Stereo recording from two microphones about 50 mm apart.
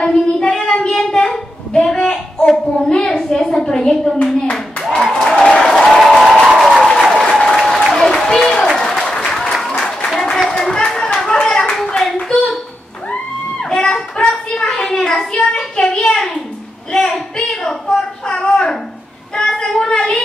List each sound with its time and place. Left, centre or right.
0.4 s child singing: centre
0.8 s a sound: centre
2.9 s a woman's voice: centre
5.3 s applause: centre
5.9 s applause: centre
10.6 s hands: centre
13.7 s a sound: centre
15.5 s child singing: centre
17.5 s child singing: centre